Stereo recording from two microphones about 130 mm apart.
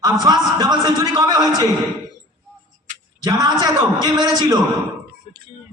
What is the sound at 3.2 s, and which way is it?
A man's voice, 30° right (ahead or behind).